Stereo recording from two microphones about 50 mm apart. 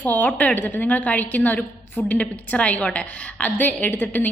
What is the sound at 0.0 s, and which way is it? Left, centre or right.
A woman's voice, left.